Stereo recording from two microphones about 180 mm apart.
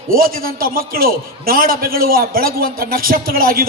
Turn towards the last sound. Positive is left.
turn(degrees=-55)  # may be behind; listen again after turning